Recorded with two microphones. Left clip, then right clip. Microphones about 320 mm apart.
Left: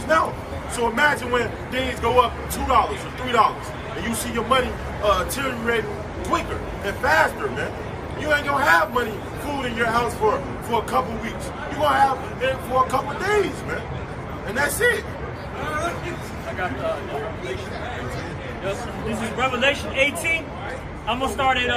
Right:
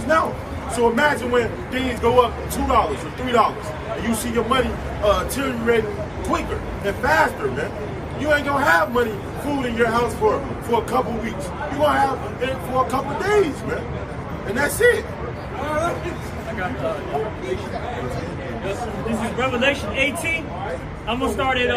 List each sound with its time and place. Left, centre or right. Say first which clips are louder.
0.1 s a sound: right 1 dB; centre
0.8 s a man's voice: right 2 dB; centre
19.4 s speech: even; centre